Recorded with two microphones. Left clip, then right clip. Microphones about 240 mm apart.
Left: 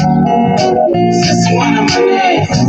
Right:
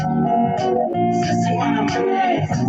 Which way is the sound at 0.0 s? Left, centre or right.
Left.